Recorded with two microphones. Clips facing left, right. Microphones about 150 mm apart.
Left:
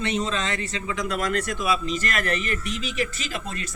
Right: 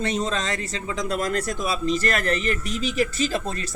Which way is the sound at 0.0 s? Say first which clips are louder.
Right 1 dB; 40° right (ahead or behind).